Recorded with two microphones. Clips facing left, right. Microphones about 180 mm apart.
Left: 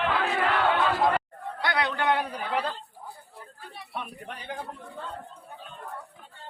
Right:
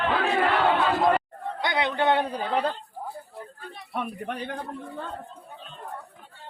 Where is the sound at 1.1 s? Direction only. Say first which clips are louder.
Right 2 dB; 20° right (ahead or behind).